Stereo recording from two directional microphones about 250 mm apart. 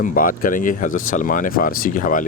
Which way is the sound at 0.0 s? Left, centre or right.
Left.